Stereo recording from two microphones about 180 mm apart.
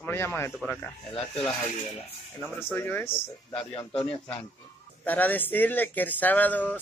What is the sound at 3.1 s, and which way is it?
Speech, 30° left (ahead or behind).